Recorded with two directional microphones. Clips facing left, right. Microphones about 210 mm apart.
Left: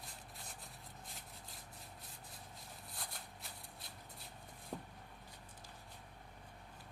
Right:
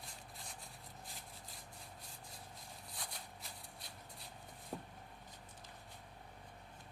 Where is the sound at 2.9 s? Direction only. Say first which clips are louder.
Even; centre (ahead or behind).